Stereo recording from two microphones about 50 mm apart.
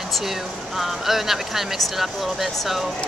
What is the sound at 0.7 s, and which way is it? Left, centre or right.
A woman's voice, centre.